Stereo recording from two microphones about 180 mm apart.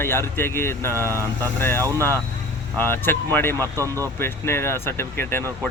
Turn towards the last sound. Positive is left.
turn(degrees=15)  # may be behind; listen again after turning